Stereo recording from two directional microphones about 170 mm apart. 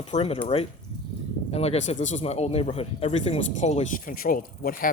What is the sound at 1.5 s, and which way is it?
Speech, 35° left (ahead or behind).